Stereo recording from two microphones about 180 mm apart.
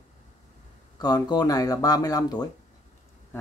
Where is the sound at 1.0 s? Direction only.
20° left (ahead or behind).